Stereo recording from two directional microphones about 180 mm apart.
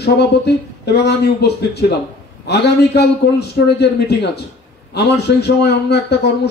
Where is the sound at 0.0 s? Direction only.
65° left (ahead or behind).